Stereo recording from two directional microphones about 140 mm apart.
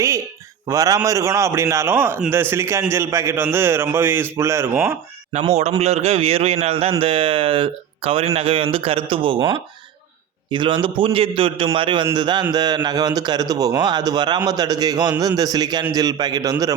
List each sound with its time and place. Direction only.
0.7 s a man's voice: 25° right (ahead or behind)
5.3 s a man's voice: 50° right (ahead or behind); by 16.7 s 25° right (ahead or behind)